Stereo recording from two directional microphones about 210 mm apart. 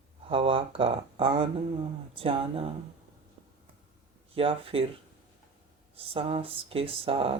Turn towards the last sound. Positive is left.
turn(degrees=-25)  # may be behind; listen again after turning